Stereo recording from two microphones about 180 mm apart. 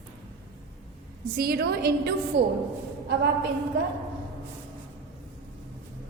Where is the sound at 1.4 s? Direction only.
60° right (ahead or behind).